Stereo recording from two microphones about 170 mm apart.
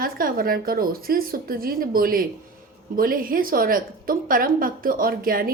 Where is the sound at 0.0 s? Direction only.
55° right (ahead or behind).